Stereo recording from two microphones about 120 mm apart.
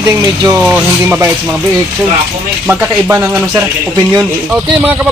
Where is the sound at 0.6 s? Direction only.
15° right (ahead or behind).